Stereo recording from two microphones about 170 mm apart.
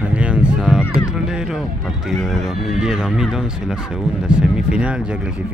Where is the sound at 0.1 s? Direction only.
5° right (ahead or behind).